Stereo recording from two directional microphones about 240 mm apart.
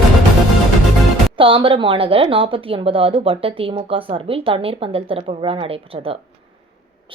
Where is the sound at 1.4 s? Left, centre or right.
Right.